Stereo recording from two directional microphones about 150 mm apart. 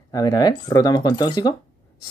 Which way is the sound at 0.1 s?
25° left (ahead or behind).